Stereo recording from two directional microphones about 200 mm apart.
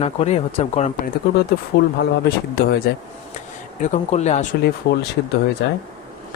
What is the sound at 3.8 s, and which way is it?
Speech, 35° left (ahead or behind).